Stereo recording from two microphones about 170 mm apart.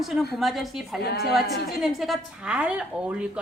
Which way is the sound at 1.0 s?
70° left (ahead or behind).